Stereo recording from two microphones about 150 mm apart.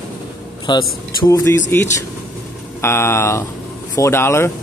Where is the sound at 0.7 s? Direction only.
30° left (ahead or behind).